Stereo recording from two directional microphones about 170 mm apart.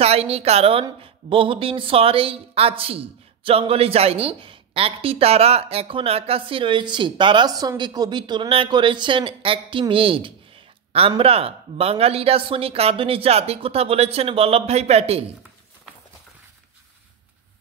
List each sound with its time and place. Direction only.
0.0 s a woman's voice: 35° right (ahead or behind)